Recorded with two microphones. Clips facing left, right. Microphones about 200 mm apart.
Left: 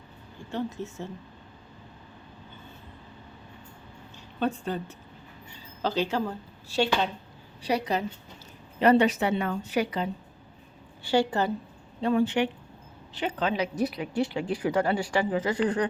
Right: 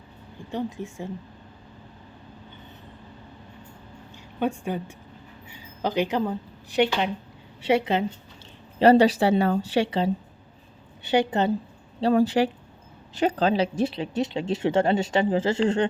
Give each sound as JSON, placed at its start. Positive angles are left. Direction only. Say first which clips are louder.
{"t": 0.5, "sound": "a woman's voice", "louder": "right 2 dB", "side_deg": -15}
{"t": 4.4, "sound": "speech", "louder": "right 2 dB", "side_deg": -15}
{"t": 11.9, "sound": "speech", "louder": "right 4 dB", "side_deg": -35}